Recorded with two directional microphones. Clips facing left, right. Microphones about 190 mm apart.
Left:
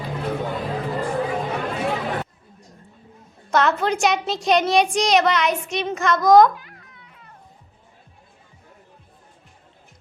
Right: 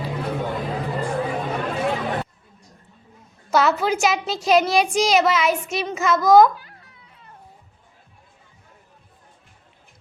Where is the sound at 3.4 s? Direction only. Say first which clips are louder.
Right 1 dB; 5° right (ahead or behind).